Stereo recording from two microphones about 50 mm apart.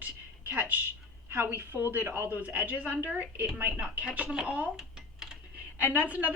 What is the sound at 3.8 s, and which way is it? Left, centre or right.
Speech, right.